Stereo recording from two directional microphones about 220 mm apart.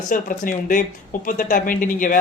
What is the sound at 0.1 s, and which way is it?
Speech, 35° left (ahead or behind).